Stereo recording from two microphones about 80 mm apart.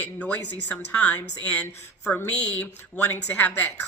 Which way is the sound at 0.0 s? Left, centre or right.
Centre.